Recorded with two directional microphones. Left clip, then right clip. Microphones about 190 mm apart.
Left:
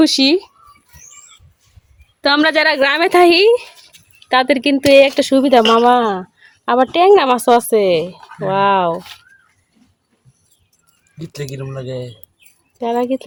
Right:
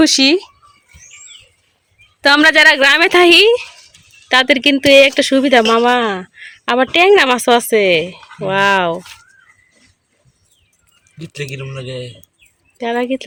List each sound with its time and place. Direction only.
0.0 s speech: 5° left (ahead or behind)
2.2 s a woman's voice: 5° left (ahead or behind)
11.2 s speech: 30° left (ahead or behind)
12.7 s a woman's voice: 5° left (ahead or behind)